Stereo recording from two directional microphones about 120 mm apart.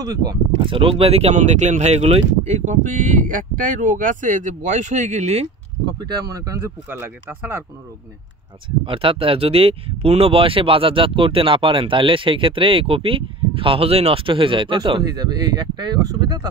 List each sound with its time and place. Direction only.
0.0 s speech: 30° right (ahead or behind)
0.7 s speech: 50° right (ahead or behind); by 5.5 s 65° right (ahead or behind)
5.9 s speech: 35° right (ahead or behind); by 7.6 s 20° right (ahead or behind)
8.6 s speech: 45° right (ahead or behind)